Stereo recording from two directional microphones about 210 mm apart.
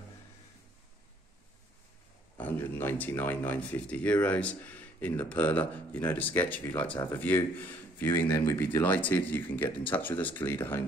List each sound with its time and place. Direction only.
2.3 s speech: 10° left (ahead or behind)